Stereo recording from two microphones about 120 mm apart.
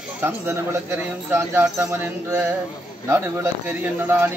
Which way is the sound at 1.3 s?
15° right (ahead or behind).